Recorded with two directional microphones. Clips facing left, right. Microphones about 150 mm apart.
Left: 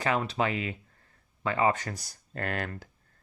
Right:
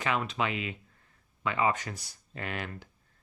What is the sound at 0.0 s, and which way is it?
Speech, 35° left (ahead or behind).